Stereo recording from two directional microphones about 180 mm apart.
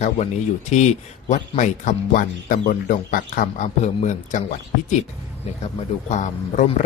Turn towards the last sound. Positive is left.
turn(degrees=45)  # may be behind; listen again after turning